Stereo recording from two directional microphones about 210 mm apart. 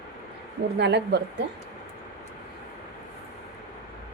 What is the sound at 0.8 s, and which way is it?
Speech, 55° right (ahead or behind).